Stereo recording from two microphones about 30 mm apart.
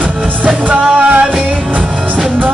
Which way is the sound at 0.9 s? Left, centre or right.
Right.